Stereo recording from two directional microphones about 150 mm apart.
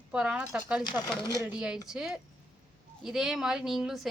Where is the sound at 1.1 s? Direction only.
25° left (ahead or behind).